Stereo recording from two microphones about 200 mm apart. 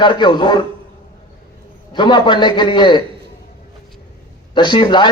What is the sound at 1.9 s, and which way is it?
A man's voice, 25° left (ahead or behind).